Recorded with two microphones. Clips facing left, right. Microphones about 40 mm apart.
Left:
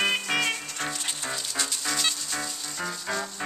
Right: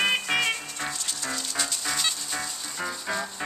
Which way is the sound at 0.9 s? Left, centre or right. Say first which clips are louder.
Left 1 dB; left.